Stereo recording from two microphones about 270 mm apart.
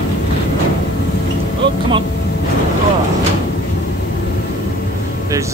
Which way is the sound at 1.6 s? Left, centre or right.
Centre.